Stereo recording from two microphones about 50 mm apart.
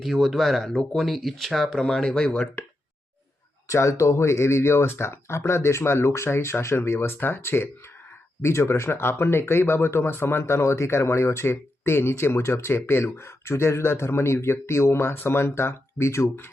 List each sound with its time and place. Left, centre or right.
0.0 s speech: centre
3.7 s speech: left